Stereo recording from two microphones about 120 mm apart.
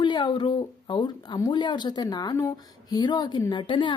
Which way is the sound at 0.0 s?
40° left (ahead or behind).